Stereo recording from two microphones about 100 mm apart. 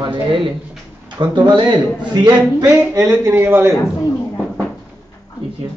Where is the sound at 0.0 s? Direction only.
60° right (ahead or behind); by 2.7 s 40° right (ahead or behind).